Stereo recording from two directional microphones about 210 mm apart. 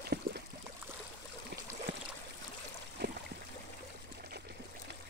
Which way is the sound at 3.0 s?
50° right (ahead or behind).